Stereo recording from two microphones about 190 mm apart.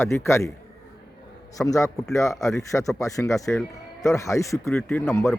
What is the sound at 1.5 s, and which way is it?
Speech, 15° left (ahead or behind).